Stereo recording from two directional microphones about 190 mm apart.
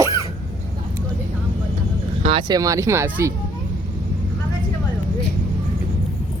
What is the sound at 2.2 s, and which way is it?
Speech, 25° right (ahead or behind).